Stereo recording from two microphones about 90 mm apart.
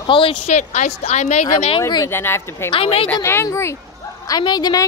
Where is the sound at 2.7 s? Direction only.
90° left.